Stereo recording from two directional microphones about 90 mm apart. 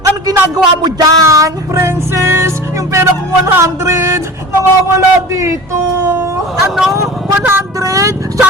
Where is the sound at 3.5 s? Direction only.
30° right (ahead or behind).